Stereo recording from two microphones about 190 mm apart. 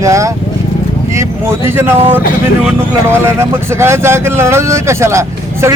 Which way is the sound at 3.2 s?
15° right (ahead or behind).